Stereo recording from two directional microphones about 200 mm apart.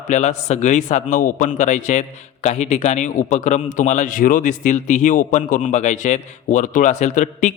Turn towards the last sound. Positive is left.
turn(degrees=35)  # may be behind; listen again after turning